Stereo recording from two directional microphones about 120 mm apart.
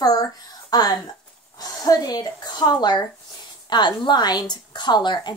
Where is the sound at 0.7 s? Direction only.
35° left (ahead or behind).